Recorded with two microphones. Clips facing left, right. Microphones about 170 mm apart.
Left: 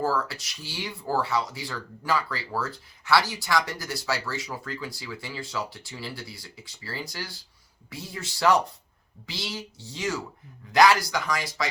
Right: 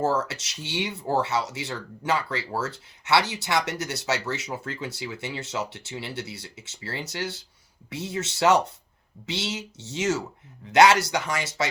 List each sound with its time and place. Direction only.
0.0 s speech: 25° right (ahead or behind)